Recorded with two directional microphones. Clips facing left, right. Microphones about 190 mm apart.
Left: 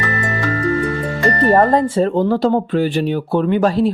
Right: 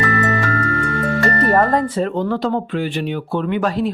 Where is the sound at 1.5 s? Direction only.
25° left (ahead or behind).